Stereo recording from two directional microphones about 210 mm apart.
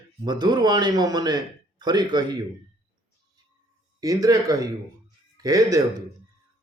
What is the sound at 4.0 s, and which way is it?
A man's voice, 15° right (ahead or behind).